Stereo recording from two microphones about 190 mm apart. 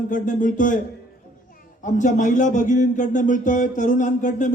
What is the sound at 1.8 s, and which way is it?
A man's voice, 40° left (ahead or behind).